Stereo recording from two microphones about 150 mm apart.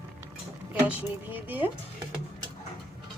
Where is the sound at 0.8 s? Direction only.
10° right (ahead or behind).